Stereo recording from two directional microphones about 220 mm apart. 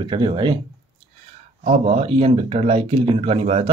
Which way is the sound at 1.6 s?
30° right (ahead or behind).